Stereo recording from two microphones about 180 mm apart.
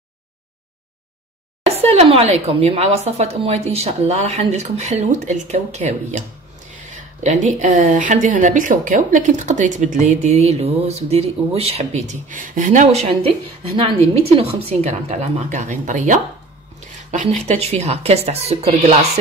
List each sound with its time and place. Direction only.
1.8 s speech: 35° right (ahead or behind)